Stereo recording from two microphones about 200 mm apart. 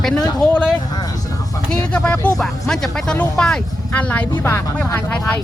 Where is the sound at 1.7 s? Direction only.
5° left (ahead or behind).